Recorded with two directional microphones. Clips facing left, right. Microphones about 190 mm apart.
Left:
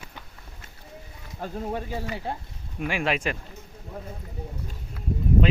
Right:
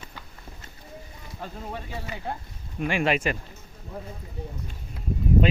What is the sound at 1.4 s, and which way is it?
Speech, 45° left (ahead or behind).